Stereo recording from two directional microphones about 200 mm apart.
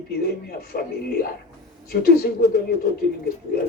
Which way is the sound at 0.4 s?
50° left (ahead or behind).